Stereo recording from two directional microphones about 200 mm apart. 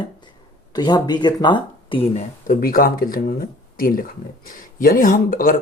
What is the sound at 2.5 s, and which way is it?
Speech, 45° left (ahead or behind).